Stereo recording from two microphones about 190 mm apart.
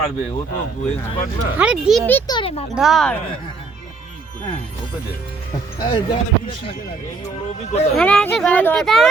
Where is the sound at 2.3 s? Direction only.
25° left (ahead or behind).